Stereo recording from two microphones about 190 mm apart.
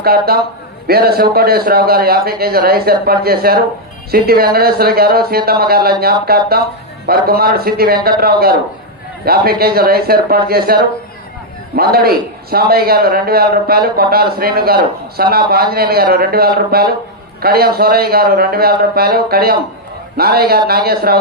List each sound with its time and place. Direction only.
0.0 s a man's voice: 55° right (ahead or behind)